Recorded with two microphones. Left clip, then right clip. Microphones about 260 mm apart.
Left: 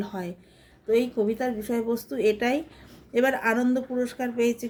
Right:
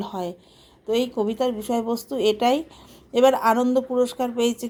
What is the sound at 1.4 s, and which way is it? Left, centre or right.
Speech, centre.